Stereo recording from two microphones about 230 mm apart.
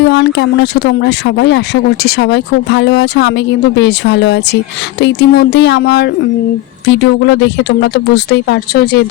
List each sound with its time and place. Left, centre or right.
0.0 s speech: left